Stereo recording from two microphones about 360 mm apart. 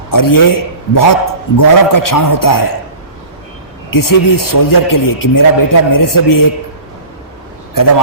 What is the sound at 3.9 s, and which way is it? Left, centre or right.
A man's voice, left.